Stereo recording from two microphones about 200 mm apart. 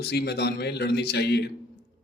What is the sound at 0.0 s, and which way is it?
Speech, 55° left (ahead or behind).